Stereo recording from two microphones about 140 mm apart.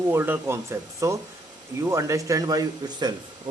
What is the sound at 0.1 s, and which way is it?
Speech, 15° right (ahead or behind).